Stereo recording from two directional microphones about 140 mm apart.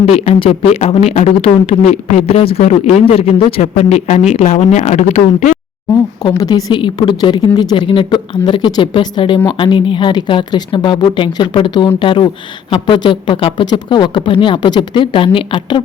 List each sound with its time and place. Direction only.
0.0 s speech: 45° left (ahead or behind)
6.2 s a woman's voice: 30° left (ahead or behind)